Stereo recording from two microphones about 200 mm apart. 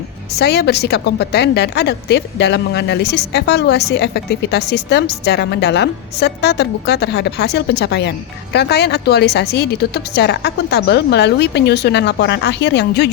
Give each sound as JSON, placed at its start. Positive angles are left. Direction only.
{"t": 0.3, "sound": "a woman's voice", "side_deg": 55}